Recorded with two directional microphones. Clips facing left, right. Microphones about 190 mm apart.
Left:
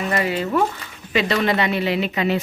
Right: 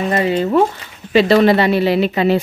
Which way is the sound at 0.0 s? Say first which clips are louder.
Right 6 dB; 25° right (ahead or behind).